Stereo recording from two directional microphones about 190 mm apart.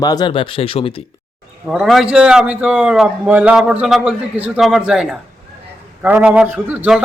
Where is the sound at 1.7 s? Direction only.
Centre (ahead or behind).